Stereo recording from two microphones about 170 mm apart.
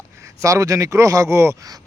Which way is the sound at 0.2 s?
20° right (ahead or behind).